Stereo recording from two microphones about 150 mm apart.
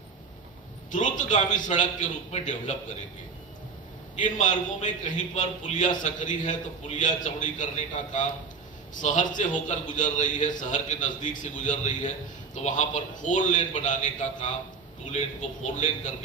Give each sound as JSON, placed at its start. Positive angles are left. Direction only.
{"t": 0.9, "sound": "a man's voice", "side_deg": 55}
{"t": 4.4, "sound": "a man's voice", "side_deg": 55}